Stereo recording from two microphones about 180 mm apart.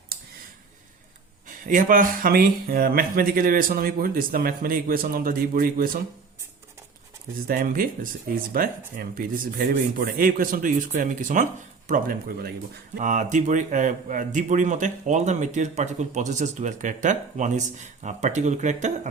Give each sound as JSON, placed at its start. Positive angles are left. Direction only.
{"t": 1.5, "sound": "speech", "side_deg": -50}
{"t": 7.4, "sound": "speech", "side_deg": -50}
{"t": 13.0, "sound": "speech", "side_deg": -45}